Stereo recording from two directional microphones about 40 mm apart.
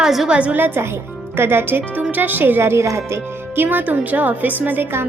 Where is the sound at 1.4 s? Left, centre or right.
Right.